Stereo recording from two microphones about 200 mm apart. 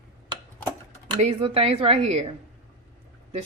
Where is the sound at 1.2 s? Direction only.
30° right (ahead or behind).